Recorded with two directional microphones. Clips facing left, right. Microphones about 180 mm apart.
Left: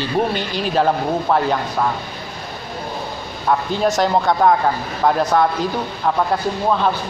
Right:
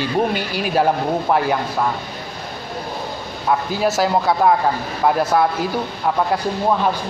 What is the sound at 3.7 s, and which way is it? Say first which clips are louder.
A woman's voice: left 1 dB; 5° right (ahead or behind).